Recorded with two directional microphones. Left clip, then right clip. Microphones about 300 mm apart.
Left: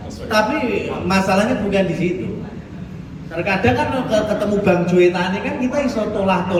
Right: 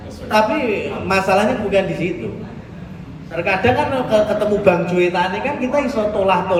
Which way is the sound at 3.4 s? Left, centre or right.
Centre.